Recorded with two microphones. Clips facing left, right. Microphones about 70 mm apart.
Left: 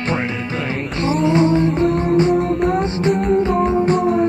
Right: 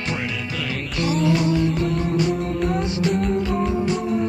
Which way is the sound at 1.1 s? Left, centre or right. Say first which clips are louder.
Left 5 dB; left.